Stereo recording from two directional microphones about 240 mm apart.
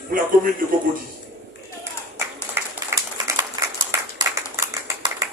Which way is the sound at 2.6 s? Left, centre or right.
Centre.